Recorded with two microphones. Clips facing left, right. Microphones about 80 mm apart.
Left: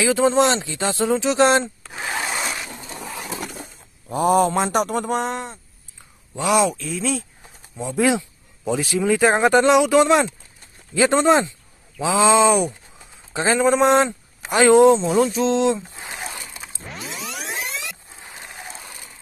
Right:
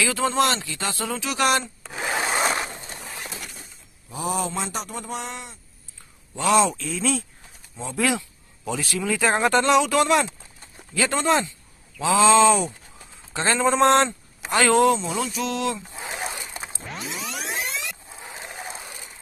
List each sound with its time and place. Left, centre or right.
0.0 s speech: left
2.0 s wood: centre
2.2 s zipper: right
3.3 s a sound: left
4.1 s speech: left
6.3 s speech: centre
7.7 s speech: centre
14.0 s speech: centre
16.5 s zipper: right
16.9 s music: centre
18.4 s a sound: centre